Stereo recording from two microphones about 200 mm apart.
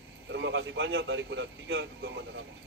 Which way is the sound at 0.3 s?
65° right (ahead or behind).